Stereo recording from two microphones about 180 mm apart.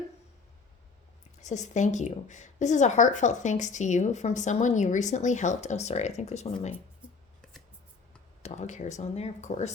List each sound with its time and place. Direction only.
1.4 s speech: 40° left (ahead or behind)
8.4 s speech: 40° left (ahead or behind)